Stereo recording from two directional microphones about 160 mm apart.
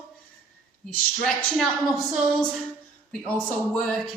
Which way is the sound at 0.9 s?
10° left (ahead or behind).